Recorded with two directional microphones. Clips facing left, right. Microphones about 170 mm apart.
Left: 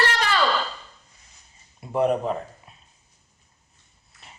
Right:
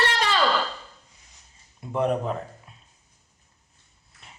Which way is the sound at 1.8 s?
5° left (ahead or behind).